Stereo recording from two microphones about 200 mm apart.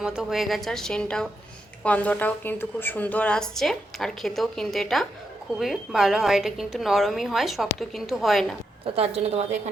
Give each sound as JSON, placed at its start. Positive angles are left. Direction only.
{"t": 0.0, "sound": "a woman's voice", "side_deg": 0}
{"t": 9.0, "sound": "a woman's voice", "side_deg": -30}